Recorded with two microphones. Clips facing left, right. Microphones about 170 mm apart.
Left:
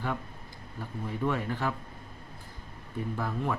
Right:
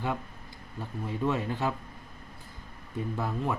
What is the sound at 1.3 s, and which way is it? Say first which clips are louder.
Speech: right 2 dB; 20° right (ahead or behind).